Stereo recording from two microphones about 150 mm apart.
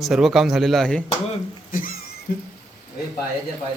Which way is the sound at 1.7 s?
70° left (ahead or behind).